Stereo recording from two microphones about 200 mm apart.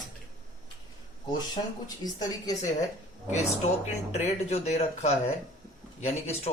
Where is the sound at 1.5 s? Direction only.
20° left (ahead or behind).